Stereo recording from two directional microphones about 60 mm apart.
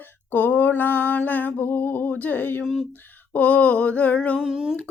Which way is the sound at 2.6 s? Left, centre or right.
Centre.